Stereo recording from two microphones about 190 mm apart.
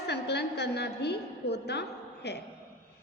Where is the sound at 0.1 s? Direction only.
60° left (ahead or behind).